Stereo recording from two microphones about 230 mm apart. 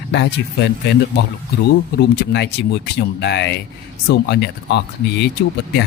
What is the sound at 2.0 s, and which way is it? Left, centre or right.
Speech, left.